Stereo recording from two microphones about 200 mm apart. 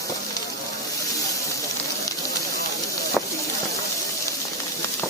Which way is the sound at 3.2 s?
5° right (ahead or behind).